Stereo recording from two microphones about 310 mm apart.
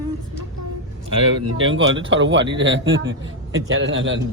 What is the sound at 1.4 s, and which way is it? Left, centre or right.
A man's voice, right.